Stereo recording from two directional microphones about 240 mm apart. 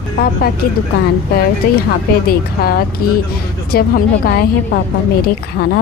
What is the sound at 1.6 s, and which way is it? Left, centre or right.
Speech, left.